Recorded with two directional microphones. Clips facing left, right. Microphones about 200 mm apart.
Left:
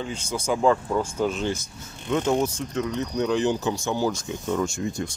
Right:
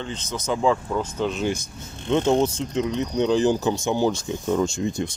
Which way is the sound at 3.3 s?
35° right (ahead or behind).